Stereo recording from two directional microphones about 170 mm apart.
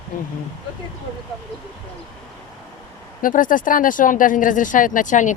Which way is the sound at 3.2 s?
50° left (ahead or behind).